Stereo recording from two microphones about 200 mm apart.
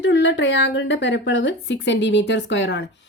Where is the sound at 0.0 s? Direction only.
65° left (ahead or behind).